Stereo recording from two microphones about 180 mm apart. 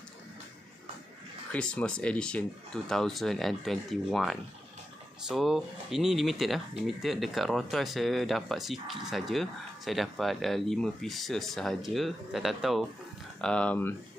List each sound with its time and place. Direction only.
1.5 s speech: 5° left (ahead or behind)